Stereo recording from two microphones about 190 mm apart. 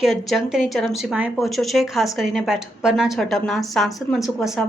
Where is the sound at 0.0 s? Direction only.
Centre (ahead or behind).